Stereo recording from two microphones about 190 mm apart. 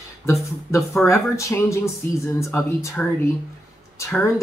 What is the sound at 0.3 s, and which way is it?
Speech, 15° left (ahead or behind).